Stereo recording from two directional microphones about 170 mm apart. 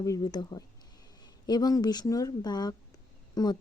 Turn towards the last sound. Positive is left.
turn(degrees=25)  # may be behind; listen again after turning